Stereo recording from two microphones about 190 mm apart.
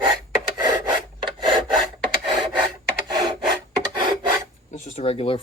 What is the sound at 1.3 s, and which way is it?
Rub, 25° right (ahead or behind).